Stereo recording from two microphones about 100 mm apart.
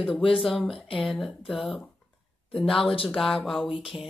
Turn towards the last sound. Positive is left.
turn(degrees=65)  # may be behind; listen again after turning